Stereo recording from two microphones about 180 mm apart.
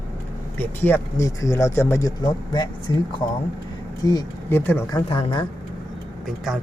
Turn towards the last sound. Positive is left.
turn(degrees=0)  # may be behind; listen again after turning